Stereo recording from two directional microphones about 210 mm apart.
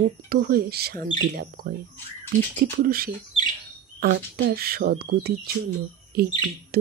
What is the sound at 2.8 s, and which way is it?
Speech, 45° right (ahead or behind).